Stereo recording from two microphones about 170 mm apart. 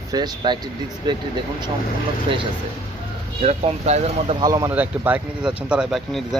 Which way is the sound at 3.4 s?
40° right (ahead or behind).